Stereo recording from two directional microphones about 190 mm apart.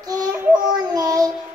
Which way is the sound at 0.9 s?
20° right (ahead or behind).